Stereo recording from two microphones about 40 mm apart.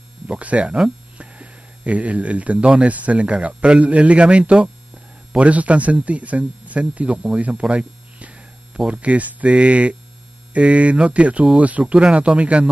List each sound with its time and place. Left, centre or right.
0.3 s speech: right
11.8 s speech: right